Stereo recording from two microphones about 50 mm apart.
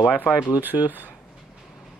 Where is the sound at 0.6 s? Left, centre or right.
Right.